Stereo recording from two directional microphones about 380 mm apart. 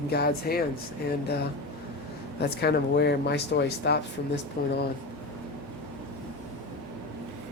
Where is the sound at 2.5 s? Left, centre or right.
Left.